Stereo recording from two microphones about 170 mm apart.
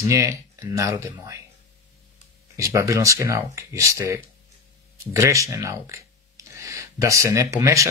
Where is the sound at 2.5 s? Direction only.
15° right (ahead or behind).